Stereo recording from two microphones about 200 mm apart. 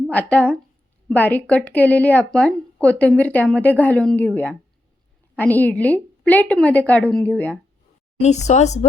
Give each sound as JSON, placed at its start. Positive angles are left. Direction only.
{"t": 0.1, "sound": "speech", "side_deg": 5}
{"t": 8.2, "sound": "speech", "side_deg": 35}